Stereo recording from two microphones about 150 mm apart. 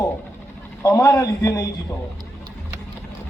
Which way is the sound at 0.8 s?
20° left (ahead or behind).